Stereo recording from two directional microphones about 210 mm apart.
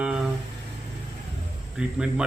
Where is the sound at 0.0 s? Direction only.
5° right (ahead or behind).